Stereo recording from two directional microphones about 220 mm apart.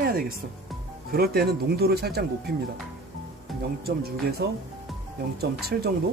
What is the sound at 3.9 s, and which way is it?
Speech, 45° right (ahead or behind).